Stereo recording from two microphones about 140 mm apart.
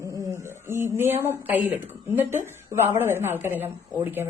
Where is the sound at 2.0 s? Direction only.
15° right (ahead or behind).